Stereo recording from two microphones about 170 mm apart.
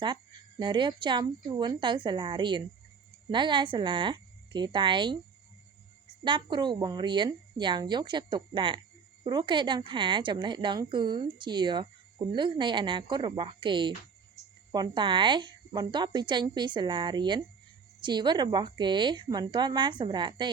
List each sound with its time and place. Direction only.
0.6 s speech: 25° right (ahead or behind)
6.2 s speech: 30° right (ahead or behind)